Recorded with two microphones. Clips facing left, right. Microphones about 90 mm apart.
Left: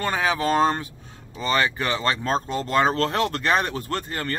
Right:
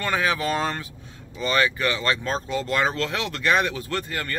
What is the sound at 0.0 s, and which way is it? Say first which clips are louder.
Speech: left 1 dB; 30° left (ahead or behind).